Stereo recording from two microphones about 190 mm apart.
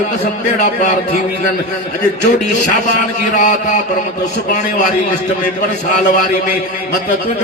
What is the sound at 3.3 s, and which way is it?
Speech, 40° left (ahead or behind).